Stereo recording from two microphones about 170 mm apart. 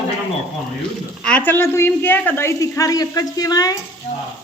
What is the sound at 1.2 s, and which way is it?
A woman's voice, 10° left (ahead or behind).